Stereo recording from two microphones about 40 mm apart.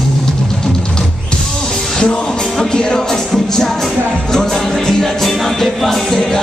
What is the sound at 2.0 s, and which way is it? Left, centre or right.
Music, left.